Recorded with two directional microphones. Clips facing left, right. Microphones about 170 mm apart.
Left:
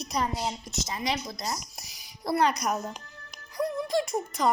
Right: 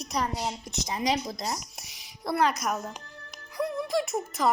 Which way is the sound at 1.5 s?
Centre (ahead or behind).